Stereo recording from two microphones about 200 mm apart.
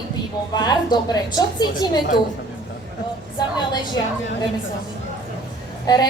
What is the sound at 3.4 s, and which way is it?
Speech, 20° left (ahead or behind).